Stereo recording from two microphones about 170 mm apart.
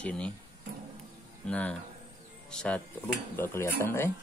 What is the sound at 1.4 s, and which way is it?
Cutlery, 10° left (ahead or behind).